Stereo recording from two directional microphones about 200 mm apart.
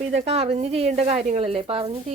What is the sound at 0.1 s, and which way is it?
Speech, 30° right (ahead or behind).